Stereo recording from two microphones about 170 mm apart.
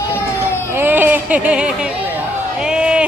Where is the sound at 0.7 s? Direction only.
10° right (ahead or behind).